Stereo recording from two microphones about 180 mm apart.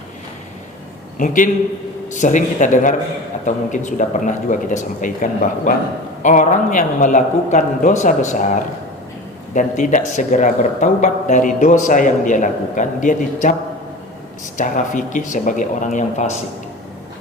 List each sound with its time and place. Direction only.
1.2 s speech: 45° left (ahead or behind)
14.6 s speech: 45° left (ahead or behind)